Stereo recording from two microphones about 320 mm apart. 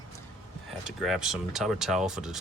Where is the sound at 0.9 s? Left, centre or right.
Centre.